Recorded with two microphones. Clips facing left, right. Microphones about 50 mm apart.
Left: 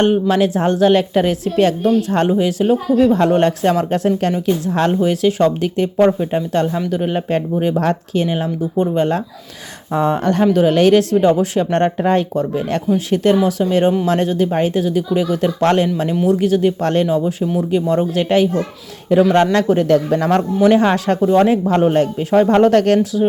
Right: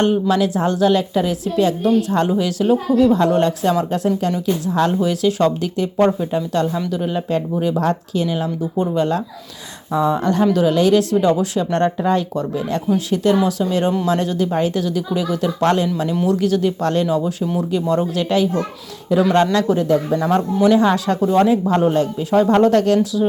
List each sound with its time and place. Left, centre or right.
0.0 s speech: left
6.0 s speech: left
6.3 s speech: left
16.2 s speech: left
17.1 s speech: left
19.5 s speech: left
19.9 s speech: left
20.6 s speech: left
21.2 s speech: left
21.9 s speech: left